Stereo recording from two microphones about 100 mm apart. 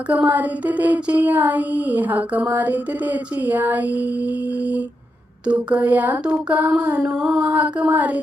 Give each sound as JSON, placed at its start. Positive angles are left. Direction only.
{"t": 0.1, "sound": "female singing", "side_deg": -15}